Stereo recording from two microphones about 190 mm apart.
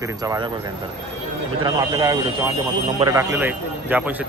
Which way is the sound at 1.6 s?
20° right (ahead or behind).